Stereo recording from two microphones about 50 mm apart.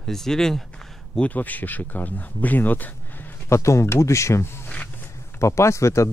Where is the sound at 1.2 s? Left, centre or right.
Left.